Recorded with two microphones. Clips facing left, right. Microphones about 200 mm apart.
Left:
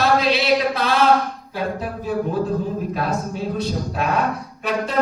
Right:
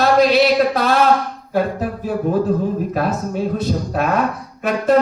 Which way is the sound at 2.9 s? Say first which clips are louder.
Right 4 dB; 45° right (ahead or behind).